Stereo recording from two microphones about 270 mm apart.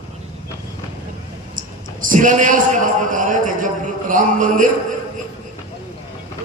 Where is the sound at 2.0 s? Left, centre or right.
Right.